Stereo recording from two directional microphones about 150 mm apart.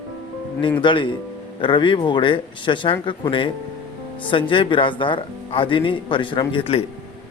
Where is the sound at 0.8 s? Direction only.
35° left (ahead or behind).